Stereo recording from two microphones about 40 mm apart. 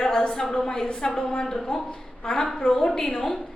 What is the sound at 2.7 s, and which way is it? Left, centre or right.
Speech, centre.